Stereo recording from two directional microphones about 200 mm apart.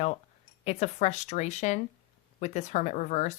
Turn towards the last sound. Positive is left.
turn(degrees=35)  # may be behind; listen again after turning